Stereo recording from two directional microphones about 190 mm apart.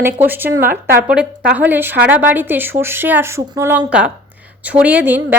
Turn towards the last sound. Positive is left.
turn(degrees=-10)  # may be behind; listen again after turning